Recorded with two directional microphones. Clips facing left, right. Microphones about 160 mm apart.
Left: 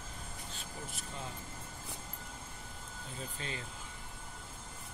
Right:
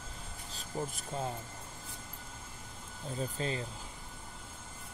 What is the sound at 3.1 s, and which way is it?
Speech, 35° right (ahead or behind).